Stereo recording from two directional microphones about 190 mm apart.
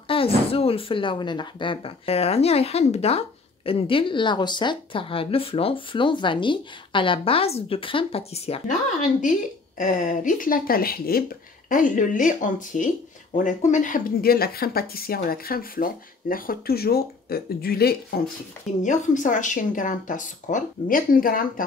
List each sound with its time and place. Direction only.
0.1 s speech: 30° left (ahead or behind); by 17.9 s 55° left (ahead or behind)
18.8 s speech: 40° left (ahead or behind)